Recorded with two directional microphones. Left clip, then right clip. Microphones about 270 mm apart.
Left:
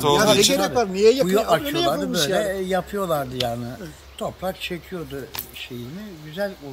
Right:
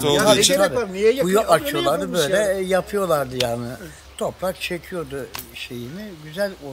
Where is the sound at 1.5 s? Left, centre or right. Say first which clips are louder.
Right 2 dB; centre.